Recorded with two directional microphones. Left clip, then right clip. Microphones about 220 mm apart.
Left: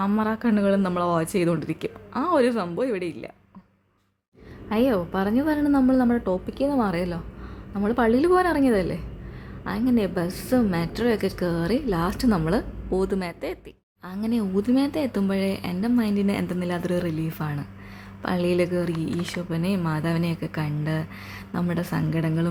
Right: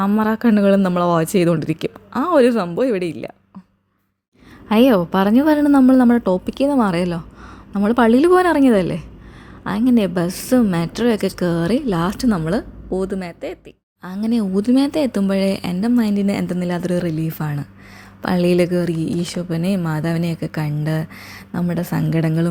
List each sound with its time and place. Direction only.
0.0 s speech: 30° right (ahead or behind)
4.7 s a woman's voice: 35° right (ahead or behind); by 13.6 s 10° right (ahead or behind)
14.0 s a woman's voice: 25° right (ahead or behind)